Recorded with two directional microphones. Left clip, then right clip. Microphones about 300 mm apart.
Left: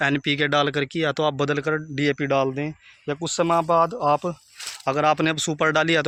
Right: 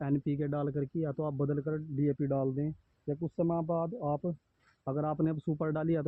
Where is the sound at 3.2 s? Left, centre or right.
Left.